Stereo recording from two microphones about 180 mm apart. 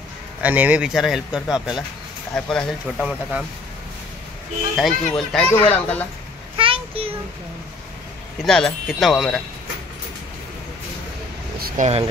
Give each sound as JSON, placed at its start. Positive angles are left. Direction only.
{"t": 0.4, "sound": "speech", "side_deg": -10}
{"t": 4.7, "sound": "speech", "side_deg": 0}
{"t": 6.5, "sound": "a sound", "side_deg": -30}
{"t": 8.5, "sound": "speech", "side_deg": 5}
{"t": 11.6, "sound": "speech", "side_deg": -45}